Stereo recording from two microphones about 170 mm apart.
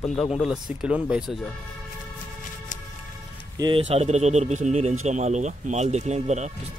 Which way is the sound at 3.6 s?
35° right (ahead or behind).